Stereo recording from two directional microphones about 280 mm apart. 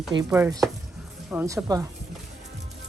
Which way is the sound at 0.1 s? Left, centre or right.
Centre.